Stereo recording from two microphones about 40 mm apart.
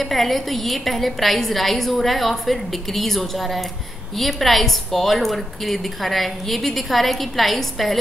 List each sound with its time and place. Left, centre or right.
0.0 s a woman's voice: centre